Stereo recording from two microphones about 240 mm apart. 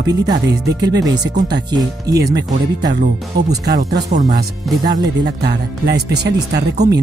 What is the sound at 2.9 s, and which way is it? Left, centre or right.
Speech, right.